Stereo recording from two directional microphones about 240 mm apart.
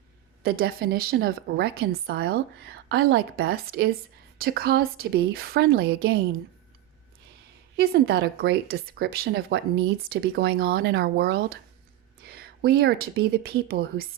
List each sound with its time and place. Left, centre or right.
0.4 s a woman's voice: right
7.8 s a woman's voice: right